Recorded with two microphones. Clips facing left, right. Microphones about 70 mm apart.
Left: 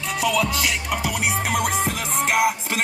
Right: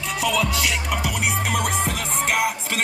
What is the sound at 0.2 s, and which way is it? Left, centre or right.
Music, centre.